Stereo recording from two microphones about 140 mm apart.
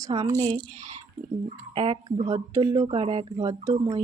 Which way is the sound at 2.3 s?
30° right (ahead or behind).